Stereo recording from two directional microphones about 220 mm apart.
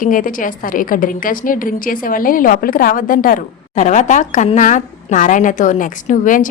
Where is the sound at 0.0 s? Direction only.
35° left (ahead or behind).